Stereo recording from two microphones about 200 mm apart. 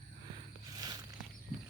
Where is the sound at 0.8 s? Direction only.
20° right (ahead or behind).